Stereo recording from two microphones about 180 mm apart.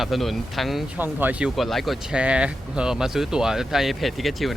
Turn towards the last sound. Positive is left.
turn(degrees=0)  # may be behind; listen again after turning